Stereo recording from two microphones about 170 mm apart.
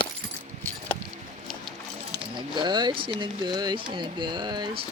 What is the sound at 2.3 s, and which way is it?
Speech, 25° right (ahead or behind).